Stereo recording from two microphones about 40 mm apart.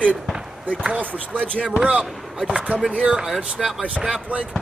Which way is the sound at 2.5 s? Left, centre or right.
Right.